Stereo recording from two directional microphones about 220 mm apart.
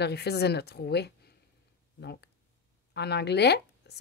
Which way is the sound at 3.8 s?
50° left (ahead or behind).